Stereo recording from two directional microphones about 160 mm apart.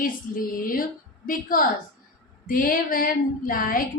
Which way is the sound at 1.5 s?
60° left (ahead or behind).